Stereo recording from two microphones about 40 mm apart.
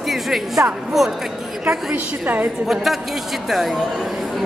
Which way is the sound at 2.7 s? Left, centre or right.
Centre.